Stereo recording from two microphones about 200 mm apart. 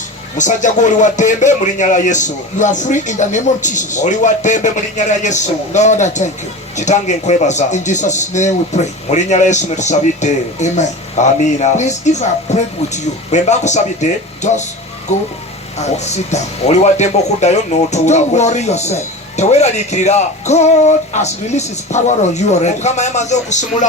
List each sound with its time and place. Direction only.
0.3 s speech: 40° left (ahead or behind)
15.8 s speech: 35° left (ahead or behind)